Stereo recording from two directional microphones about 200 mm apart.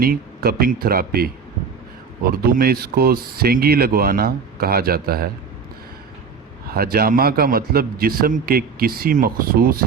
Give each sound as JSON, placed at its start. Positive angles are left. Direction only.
{"t": 0.0, "sound": "a man's voice", "side_deg": -50}
{"t": 6.7, "sound": "a man's voice", "side_deg": -50}